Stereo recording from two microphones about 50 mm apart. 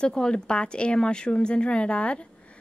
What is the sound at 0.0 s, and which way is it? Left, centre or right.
A woman's voice, centre.